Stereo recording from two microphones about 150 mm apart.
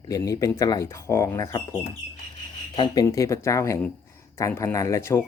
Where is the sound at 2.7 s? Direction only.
30° left (ahead or behind).